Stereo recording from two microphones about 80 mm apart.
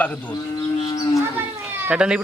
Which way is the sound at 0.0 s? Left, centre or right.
Centre.